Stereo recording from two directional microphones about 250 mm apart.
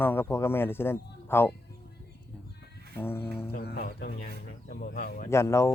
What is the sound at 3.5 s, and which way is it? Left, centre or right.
Speech, left.